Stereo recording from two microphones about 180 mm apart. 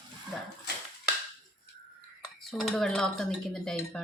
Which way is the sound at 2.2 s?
Centre (ahead or behind).